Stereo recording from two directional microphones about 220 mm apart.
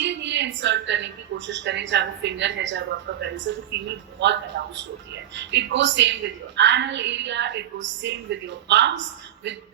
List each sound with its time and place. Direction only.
0.0 s a woman's voice: 55° right (ahead or behind)